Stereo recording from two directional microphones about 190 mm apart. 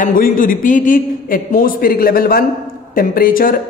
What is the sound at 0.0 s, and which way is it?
A man's voice, 45° left (ahead or behind).